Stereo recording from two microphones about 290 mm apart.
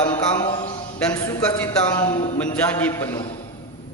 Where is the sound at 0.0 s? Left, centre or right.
Centre.